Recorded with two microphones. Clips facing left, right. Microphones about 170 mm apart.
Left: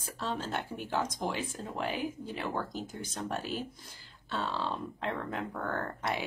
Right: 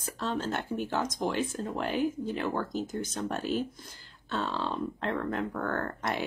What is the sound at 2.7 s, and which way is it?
Speech, 45° right (ahead or behind).